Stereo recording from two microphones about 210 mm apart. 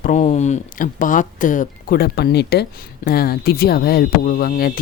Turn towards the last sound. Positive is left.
turn(degrees=45)  # may be behind; listen again after turning